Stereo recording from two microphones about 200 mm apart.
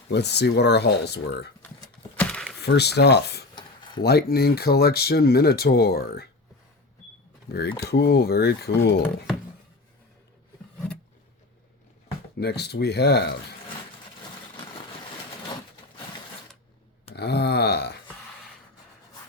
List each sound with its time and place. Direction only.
0.1 s speech: 55° left (ahead or behind)
2.1 s a sound: 5° left (ahead or behind)
2.6 s speech: 55° left (ahead or behind)
3.5 s a sound: 20° left (ahead or behind)
4.0 s speech: 50° left (ahead or behind)
7.5 s speech: 55° left (ahead or behind)
12.4 s speech: 55° left (ahead or behind)
17.2 s speech: 55° left (ahead or behind)